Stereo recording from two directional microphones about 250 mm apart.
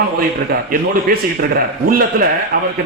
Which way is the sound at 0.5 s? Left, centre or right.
Right.